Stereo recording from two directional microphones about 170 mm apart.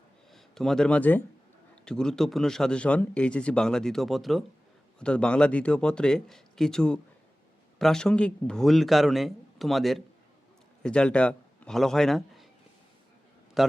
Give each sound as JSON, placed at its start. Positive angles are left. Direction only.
{"t": 0.3, "sound": "a man's voice", "side_deg": 0}
{"t": 13.6, "sound": "a man's voice", "side_deg": 0}